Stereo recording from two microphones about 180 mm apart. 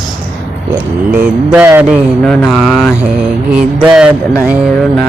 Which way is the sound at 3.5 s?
5° right (ahead or behind).